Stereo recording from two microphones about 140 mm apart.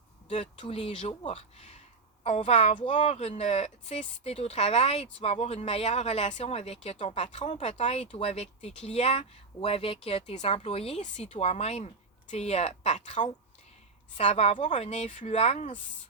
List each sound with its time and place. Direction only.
0.6 s speech: 45° left (ahead or behind)